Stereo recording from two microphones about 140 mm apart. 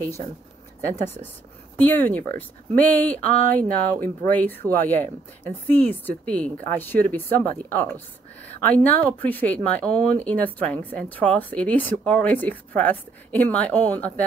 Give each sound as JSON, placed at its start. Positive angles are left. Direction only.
{"t": 0.8, "sound": "speech", "side_deg": 15}
{"t": 3.3, "sound": "speech", "side_deg": -70}
{"t": 4.3, "sound": "speech", "side_deg": 10}